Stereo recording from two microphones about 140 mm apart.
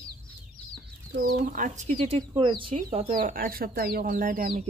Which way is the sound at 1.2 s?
80° right.